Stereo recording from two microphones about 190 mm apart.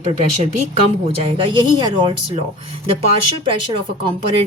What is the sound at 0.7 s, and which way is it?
Speech, 30° right (ahead or behind).